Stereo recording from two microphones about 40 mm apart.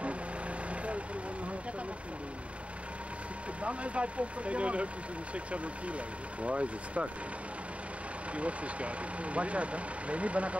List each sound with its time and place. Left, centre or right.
3.6 s speech: right
8.4 s speech: right